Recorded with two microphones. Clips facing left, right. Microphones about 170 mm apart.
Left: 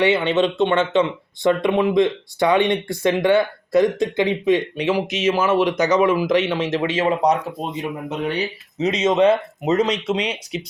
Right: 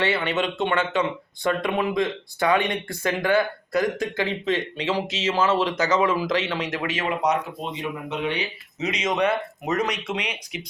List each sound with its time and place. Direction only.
0.0 s speech: 20° left (ahead or behind); by 8.4 s 40° left (ahead or behind)
8.8 s speech: 25° left (ahead or behind)